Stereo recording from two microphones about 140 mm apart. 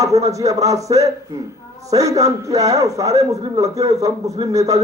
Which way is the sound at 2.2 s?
25° right (ahead or behind).